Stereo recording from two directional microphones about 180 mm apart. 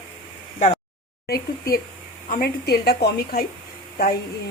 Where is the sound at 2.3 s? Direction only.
55° left (ahead or behind).